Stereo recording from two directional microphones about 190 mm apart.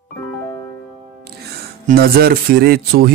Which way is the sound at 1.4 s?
50° right (ahead or behind).